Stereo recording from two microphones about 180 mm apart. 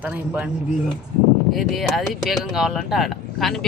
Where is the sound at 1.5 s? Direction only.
Centre (ahead or behind).